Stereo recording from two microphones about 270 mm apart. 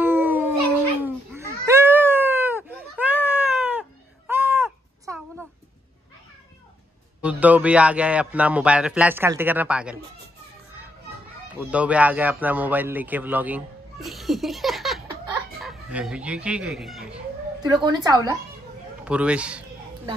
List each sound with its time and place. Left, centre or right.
0.0 s howl: centre
1.0 s a sound: centre
7.2 s a man's voice: centre
11.5 s a man's voice: centre
15.6 s chicken: centre
16.4 s a man's voice: centre
17.6 s a man's voice: centre